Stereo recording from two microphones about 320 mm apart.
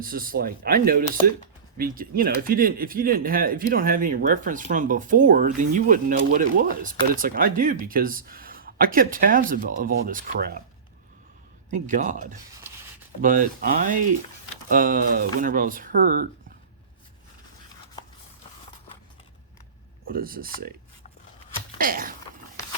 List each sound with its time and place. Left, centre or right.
0.0 s speech: right
11.7 s speech: right
20.1 s speech: right
21.8 s a sound: right